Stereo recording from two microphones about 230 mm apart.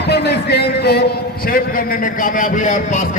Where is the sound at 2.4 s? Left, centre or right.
Left.